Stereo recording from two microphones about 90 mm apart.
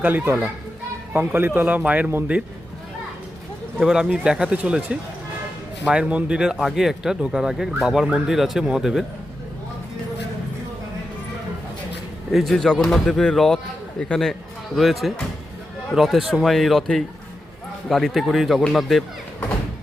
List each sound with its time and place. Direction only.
0.0 s speech: 20° right (ahead or behind)
3.8 s speech: 5° right (ahead or behind)
12.3 s a man's voice: centre (ahead or behind)